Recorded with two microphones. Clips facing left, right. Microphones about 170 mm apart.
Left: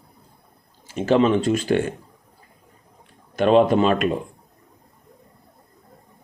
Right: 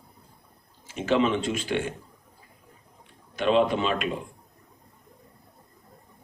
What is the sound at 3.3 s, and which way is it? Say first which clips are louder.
Speech: left 6 dB; 45° left (ahead or behind).